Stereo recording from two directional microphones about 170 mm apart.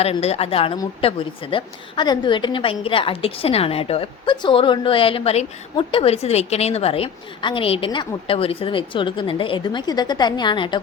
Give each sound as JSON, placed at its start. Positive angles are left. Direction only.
{"t": 0.0, "sound": "a woman's voice", "side_deg": 40}